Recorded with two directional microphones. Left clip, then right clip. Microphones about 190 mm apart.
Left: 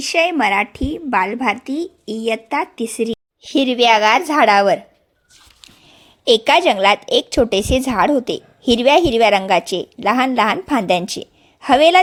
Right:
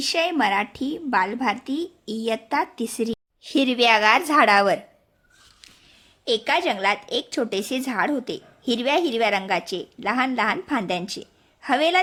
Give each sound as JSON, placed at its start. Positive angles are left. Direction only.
{"t": 0.0, "sound": "a woman's voice", "side_deg": 20}
{"t": 6.2, "sound": "a woman's voice", "side_deg": 35}